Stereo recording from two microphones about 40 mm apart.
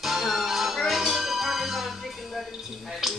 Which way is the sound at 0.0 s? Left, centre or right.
Centre.